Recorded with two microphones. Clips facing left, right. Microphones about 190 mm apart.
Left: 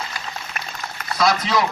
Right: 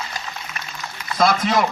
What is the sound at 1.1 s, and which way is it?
Speech, 50° right (ahead or behind).